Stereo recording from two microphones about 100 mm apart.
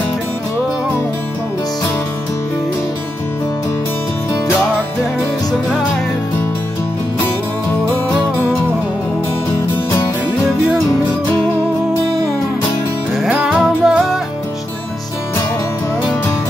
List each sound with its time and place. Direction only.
13.2 s music: 5° right (ahead or behind)